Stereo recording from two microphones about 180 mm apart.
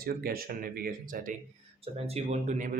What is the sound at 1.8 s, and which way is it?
Speech, 35° right (ahead or behind).